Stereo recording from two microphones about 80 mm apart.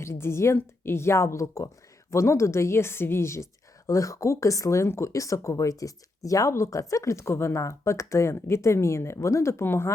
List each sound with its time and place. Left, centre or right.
0.0 s speech: left